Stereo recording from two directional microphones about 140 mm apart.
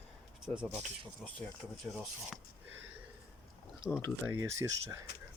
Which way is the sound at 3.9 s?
Centre (ahead or behind).